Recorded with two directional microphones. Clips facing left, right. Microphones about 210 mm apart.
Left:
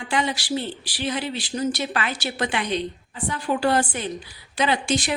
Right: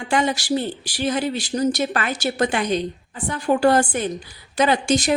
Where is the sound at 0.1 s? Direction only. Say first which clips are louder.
Right 4 dB; 45° right (ahead or behind).